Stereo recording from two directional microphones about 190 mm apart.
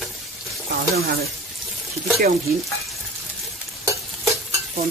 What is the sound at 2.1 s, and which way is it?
Stir, 50° right (ahead or behind).